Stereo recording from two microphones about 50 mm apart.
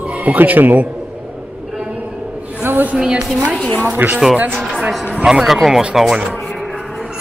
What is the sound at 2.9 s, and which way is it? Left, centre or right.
Speech, centre.